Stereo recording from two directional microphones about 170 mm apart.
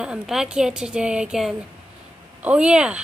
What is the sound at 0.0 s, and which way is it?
A woman's voice, 5° right (ahead or behind).